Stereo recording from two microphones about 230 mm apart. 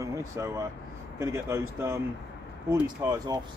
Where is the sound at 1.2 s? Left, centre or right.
Centre.